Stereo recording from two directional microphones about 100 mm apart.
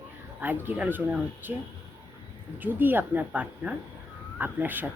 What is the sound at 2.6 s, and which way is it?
A woman's voice, 20° right (ahead or behind).